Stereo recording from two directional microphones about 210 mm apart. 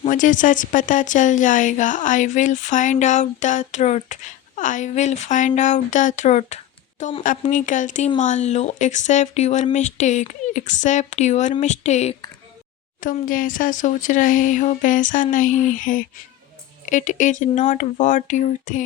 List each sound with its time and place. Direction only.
0.0 s speech: 40° left (ahead or behind)